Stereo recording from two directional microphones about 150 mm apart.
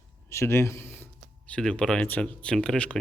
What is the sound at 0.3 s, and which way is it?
Speech, 20° left (ahead or behind).